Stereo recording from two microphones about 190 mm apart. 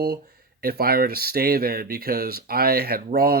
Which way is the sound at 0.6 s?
55° right (ahead or behind).